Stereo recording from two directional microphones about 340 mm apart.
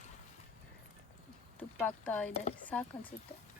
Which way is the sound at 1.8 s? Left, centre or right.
Centre.